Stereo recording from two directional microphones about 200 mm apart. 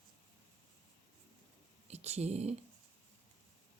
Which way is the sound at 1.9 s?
35° right (ahead or behind).